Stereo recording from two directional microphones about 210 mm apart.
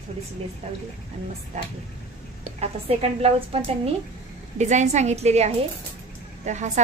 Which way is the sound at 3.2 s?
25° right (ahead or behind).